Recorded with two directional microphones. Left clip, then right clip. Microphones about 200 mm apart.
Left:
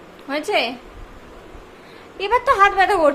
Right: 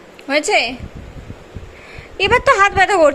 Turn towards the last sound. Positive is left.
turn(degrees=-20)  # may be behind; listen again after turning